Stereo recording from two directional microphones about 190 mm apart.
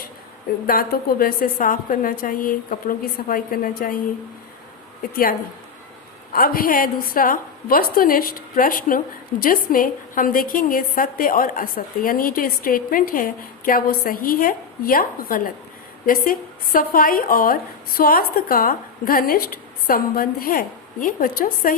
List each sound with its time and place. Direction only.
0.7 s a woman's voice: 50° left (ahead or behind)
6.3 s a woman's voice: 50° left (ahead or behind)